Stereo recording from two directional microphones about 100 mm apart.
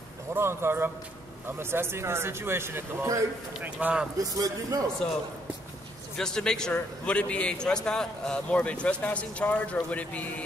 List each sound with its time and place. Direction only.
0.3 s speech: 25° right (ahead or behind)
3.6 s a man's voice: 10° right (ahead or behind)
4.2 s a man's voice: 35° right (ahead or behind)
6.1 s a man's voice: 5° left (ahead or behind)